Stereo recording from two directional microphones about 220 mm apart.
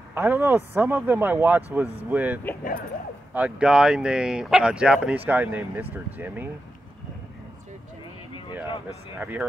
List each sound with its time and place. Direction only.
0.1 s speech: 10° right (ahead or behind)
9.2 s speech: 10° right (ahead or behind)